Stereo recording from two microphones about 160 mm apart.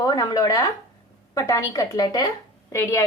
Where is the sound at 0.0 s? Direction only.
25° left (ahead or behind).